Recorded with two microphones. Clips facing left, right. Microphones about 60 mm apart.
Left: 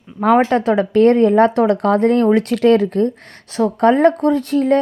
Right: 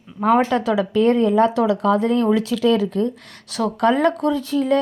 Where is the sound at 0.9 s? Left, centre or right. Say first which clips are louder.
Left 5 dB; left.